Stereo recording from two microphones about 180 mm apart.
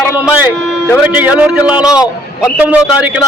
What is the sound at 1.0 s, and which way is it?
A man's voice, 10° right (ahead or behind).